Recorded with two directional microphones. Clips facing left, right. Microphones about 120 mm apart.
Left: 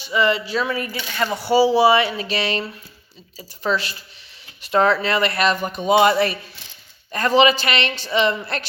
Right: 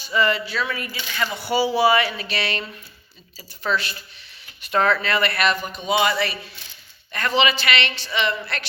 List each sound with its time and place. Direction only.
0.1 s speech: 20° left (ahead or behind)
0.5 s speech: 35° left (ahead or behind)
3.7 s speech: 25° left (ahead or behind)
5.5 s speech: 50° left (ahead or behind); by 8.6 s 35° left (ahead or behind)